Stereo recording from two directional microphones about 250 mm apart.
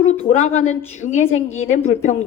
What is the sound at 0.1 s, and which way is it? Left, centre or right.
A woman's voice, left.